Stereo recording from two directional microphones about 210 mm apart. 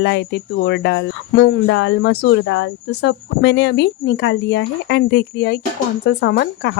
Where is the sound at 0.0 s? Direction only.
55° left (ahead or behind).